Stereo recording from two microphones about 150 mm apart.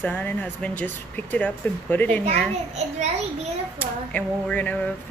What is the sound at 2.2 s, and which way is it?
Speech, 45° right (ahead or behind).